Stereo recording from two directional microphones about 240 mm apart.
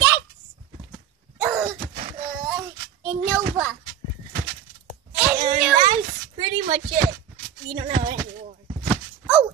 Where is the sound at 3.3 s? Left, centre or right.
Centre.